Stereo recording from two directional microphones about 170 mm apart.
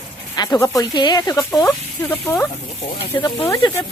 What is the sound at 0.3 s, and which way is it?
Speech, 20° left (ahead or behind).